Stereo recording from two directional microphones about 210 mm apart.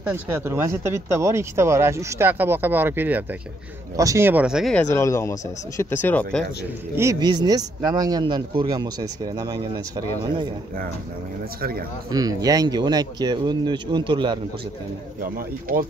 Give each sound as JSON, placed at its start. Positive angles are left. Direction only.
{"t": 0.0, "sound": "speech", "side_deg": -10}
{"t": 4.9, "sound": "speech", "side_deg": 15}
{"t": 7.0, "sound": "speech", "side_deg": -15}
{"t": 12.1, "sound": "speech", "side_deg": -15}
{"t": 15.3, "sound": "speech", "side_deg": -45}